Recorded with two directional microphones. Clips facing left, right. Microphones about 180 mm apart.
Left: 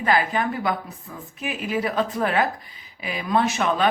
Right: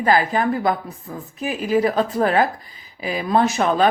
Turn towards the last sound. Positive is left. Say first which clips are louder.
# right 4 dB
turn(degrees=-40)  # may be behind; listen again after turning